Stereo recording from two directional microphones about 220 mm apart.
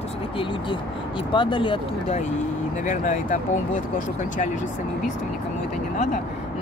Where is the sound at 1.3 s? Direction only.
20° left (ahead or behind).